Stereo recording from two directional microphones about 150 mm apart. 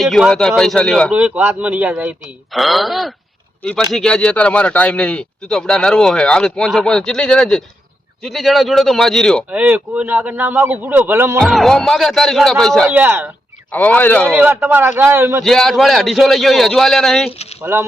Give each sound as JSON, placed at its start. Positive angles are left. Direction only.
{"t": 0.0, "sound": "speech", "side_deg": 0}
{"t": 1.1, "sound": "a man's voice", "side_deg": -10}
{"t": 9.5, "sound": "a man's voice", "side_deg": -10}
{"t": 11.3, "sound": "speech", "side_deg": 0}
{"t": 12.9, "sound": "a man's voice", "side_deg": -10}
{"t": 13.7, "sound": "speech", "side_deg": 10}
{"t": 14.3, "sound": "a man's voice", "side_deg": -15}
{"t": 15.4, "sound": "speech", "side_deg": 0}
{"t": 17.6, "sound": "a man's voice", "side_deg": -15}